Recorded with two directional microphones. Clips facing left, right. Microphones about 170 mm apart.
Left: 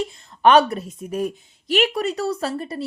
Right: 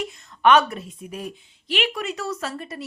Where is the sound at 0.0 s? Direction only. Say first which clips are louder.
Left 3 dB; 35° left (ahead or behind).